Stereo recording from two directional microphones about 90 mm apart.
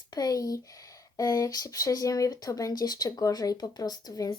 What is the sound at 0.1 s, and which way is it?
Speech, 45° left (ahead or behind).